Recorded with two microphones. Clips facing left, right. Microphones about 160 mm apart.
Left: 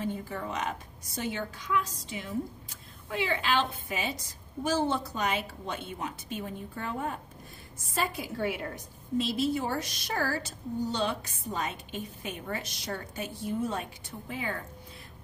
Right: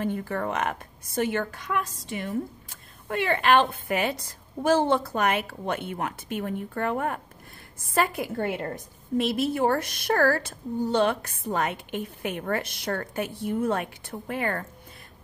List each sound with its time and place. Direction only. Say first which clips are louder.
0.0 s a woman's voice: right 6 dB; 65° right (ahead or behind)